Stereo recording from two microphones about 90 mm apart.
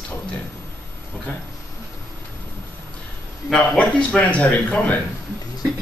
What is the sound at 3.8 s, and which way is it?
Speech, 15° left (ahead or behind).